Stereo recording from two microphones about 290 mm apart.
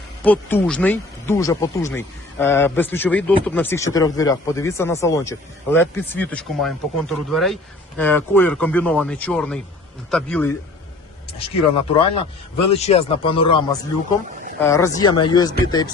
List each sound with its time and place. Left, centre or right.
0.2 s speech: centre
11.3 s speech: centre